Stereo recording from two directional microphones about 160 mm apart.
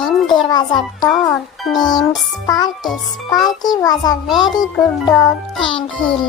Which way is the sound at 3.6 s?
25° left (ahead or behind).